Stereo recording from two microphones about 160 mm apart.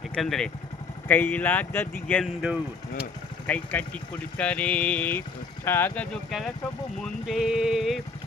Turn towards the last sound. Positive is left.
turn(degrees=-5)  # may be behind; listen again after turning